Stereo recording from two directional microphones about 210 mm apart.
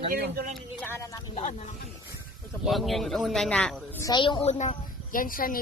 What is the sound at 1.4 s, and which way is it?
Speech, 30° left (ahead or behind).